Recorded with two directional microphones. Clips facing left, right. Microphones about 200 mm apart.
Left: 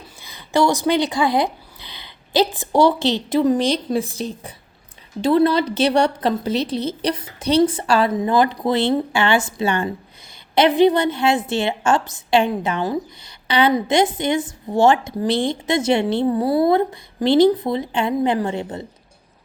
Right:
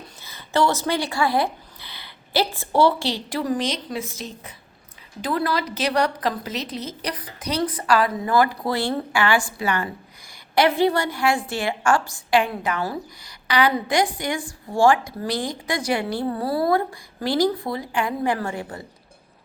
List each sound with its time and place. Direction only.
0.2 s a woman's voice: 15° left (ahead or behind)